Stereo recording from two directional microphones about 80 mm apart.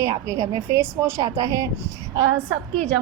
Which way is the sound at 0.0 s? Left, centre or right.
Right.